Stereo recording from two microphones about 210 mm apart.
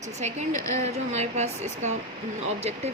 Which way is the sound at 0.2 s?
35° right (ahead or behind).